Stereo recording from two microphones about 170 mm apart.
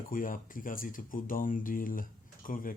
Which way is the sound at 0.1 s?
55° left (ahead or behind).